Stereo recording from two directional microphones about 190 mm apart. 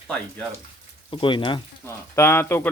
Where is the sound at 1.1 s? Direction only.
25° left (ahead or behind).